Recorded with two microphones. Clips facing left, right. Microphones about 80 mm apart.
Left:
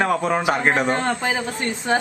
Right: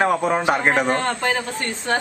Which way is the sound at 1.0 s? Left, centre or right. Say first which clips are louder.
Even; centre.